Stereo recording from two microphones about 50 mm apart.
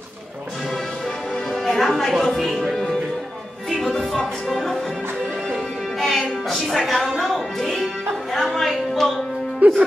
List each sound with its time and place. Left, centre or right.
1.5 s music: centre
2.3 s speech: centre
2.7 s music: centre
4.5 s music: centre
5.9 s music: centre
8.4 s a sound: centre
9.6 s music: right